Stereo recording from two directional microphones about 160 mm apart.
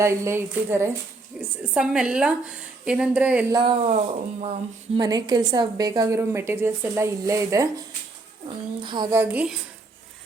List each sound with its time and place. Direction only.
0.0 s a woman's voice: 15° right (ahead or behind)
1.4 s a woman's voice: 5° right (ahead or behind)
3.5 s speech: 30° right (ahead or behind)
4.9 s a woman's voice: 25° right (ahead or behind)
8.8 s a woman's voice: 30° right (ahead or behind)
9.3 s a woman's voice: 10° right (ahead or behind)